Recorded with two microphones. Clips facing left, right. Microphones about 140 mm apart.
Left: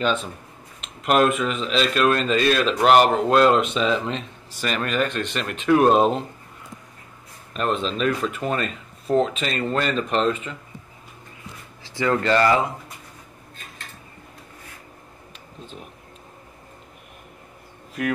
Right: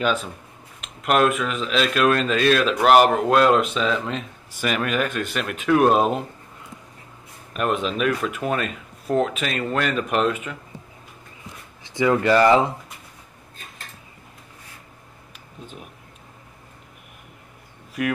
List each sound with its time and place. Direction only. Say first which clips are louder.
0.0 s speech: even; 5° right (ahead or behind)
7.5 s speech: right 1 dB; 10° right (ahead or behind)
11.8 s speech: right 3 dB; 15° right (ahead or behind)
15.6 s a sound: even; 5° right (ahead or behind)